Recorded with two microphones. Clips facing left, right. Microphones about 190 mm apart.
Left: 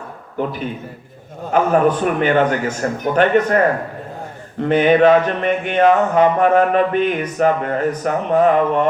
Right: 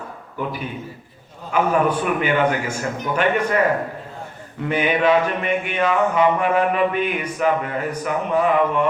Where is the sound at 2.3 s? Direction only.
45° left (ahead or behind).